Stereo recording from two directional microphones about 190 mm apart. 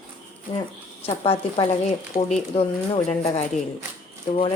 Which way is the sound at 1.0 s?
30° left (ahead or behind).